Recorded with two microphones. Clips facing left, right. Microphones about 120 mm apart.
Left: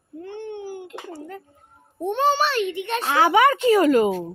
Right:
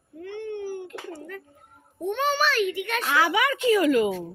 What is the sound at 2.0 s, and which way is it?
A child's voice, 30° left (ahead or behind).